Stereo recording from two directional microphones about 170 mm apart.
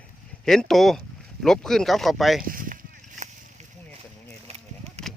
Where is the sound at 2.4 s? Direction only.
55° right (ahead or behind).